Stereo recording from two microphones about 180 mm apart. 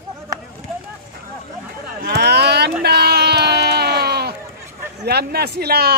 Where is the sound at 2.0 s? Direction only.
65° right (ahead or behind).